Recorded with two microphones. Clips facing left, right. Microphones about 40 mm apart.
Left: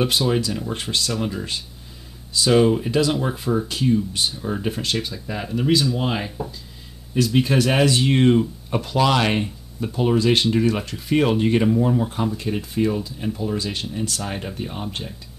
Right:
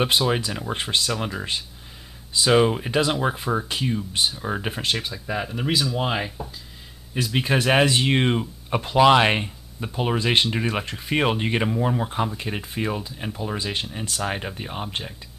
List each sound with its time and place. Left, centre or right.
0.3 s speech: right